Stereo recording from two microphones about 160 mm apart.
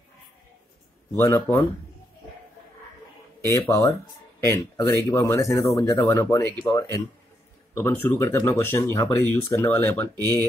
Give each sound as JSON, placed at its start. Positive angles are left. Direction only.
{"t": 1.1, "sound": "speech", "side_deg": 20}
{"t": 3.3, "sound": "speech", "side_deg": 20}